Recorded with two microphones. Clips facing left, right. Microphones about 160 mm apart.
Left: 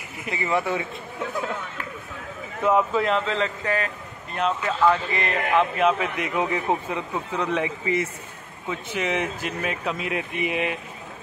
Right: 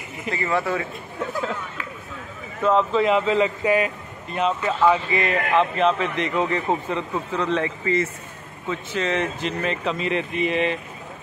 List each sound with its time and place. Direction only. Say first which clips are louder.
0.3 s speech: right 1 dB; 20° left (ahead or behind)
2.6 s speech: right 2 dB; 10° left (ahead or behind)
3.1 s speech: right 5 dB; 5° right (ahead or behind)